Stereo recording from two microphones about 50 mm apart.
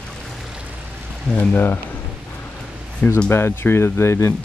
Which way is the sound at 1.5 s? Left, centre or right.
Left.